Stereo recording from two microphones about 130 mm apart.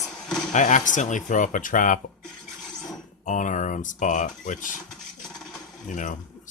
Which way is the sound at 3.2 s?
70° left (ahead or behind).